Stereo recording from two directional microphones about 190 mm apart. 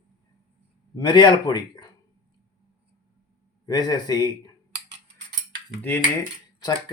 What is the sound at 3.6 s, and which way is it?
Speech, 20° left (ahead or behind).